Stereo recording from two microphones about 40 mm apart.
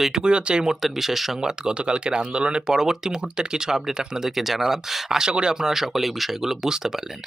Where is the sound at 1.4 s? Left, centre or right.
Centre.